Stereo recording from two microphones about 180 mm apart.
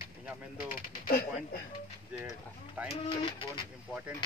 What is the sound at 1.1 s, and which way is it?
Speech, 55° left (ahead or behind).